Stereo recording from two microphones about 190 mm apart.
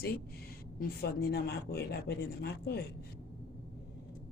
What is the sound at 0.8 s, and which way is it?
Speech, 55° left (ahead or behind).